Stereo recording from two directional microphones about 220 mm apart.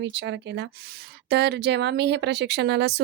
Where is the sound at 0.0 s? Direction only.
55° right (ahead or behind).